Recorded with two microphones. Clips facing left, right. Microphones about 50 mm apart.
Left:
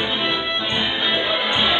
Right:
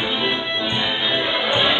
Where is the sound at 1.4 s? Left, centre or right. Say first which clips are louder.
Right 4 dB; right.